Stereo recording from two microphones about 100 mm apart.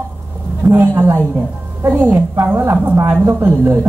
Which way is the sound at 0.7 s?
25° right (ahead or behind).